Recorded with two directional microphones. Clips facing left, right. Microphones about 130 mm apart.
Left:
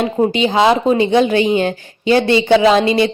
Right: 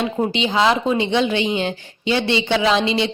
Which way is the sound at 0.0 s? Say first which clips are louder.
Left 6 dB; 45° left (ahead or behind).